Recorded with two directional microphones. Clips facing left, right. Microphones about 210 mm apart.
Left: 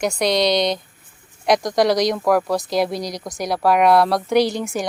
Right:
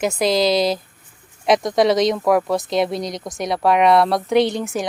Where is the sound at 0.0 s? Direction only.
Centre (ahead or behind).